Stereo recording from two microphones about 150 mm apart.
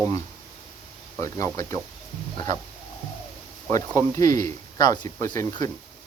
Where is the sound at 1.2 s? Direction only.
20° left (ahead or behind).